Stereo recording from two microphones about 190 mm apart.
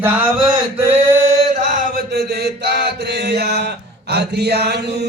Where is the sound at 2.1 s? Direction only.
55° right (ahead or behind).